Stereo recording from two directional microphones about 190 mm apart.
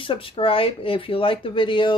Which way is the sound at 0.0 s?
30° left (ahead or behind).